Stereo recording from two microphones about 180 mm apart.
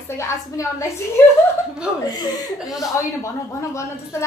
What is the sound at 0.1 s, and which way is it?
A woman's voice, 15° left (ahead or behind).